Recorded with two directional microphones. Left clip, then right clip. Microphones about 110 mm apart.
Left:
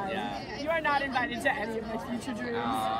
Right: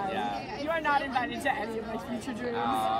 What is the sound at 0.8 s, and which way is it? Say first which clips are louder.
Speech: right 1 dB; 15° right (ahead or behind).